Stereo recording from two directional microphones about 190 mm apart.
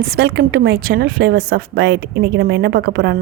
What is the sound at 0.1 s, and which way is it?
A woman's voice, 60° right (ahead or behind).